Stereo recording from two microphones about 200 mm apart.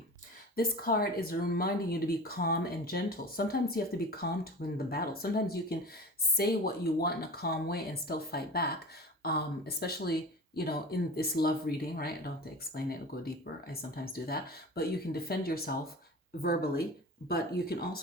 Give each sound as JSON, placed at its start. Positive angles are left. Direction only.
{"t": 0.5, "sound": "speech", "side_deg": 50}